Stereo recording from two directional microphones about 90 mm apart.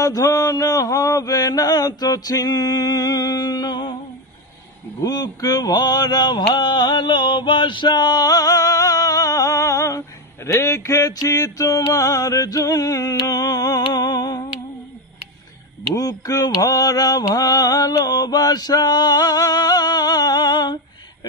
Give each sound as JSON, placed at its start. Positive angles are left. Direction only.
{"t": 0.0, "sound": "mantra", "side_deg": 40}
{"t": 5.0, "sound": "mantra", "side_deg": 40}
{"t": 15.9, "sound": "mantra", "side_deg": 40}